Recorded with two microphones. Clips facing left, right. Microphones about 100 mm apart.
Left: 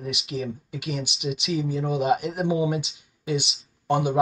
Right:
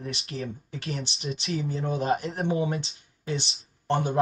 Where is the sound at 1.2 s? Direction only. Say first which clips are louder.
Left 4 dB; 35° right (ahead or behind).